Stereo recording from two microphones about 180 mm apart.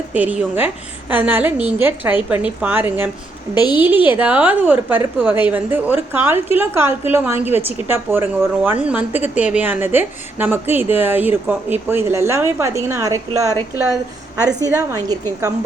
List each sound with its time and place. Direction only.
0.1 s a woman's voice: 5° right (ahead or behind)
3.5 s a woman's voice: 25° left (ahead or behind)
3.8 s a woman's voice: 10° right (ahead or behind)
14.6 s a woman's voice: 20° right (ahead or behind)